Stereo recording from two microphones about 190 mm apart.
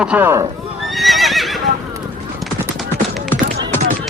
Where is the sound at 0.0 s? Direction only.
10° right (ahead or behind).